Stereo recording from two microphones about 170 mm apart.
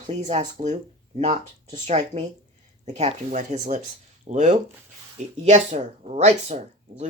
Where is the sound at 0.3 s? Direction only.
45° right (ahead or behind).